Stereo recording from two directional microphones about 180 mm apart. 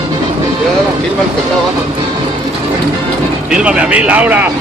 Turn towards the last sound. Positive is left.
turn(degrees=-10)  # may be behind; listen again after turning